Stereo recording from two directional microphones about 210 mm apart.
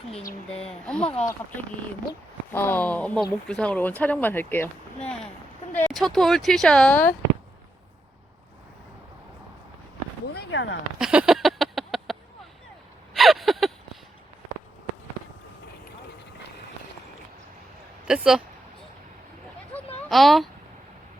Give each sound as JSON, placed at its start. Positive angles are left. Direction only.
{"t": 0.7, "sound": "speech", "side_deg": 5}
{"t": 2.5, "sound": "speech", "side_deg": 10}
{"t": 10.3, "sound": "speech", "side_deg": 60}
{"t": 10.9, "sound": "a sound", "side_deg": -5}
{"t": 13.1, "sound": "a sound", "side_deg": 0}
{"t": 18.1, "sound": "speech", "side_deg": -5}
{"t": 20.1, "sound": "a child's voice", "side_deg": 0}